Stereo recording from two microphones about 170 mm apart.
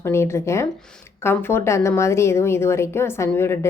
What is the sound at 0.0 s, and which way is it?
A woman's voice, 15° left (ahead or behind).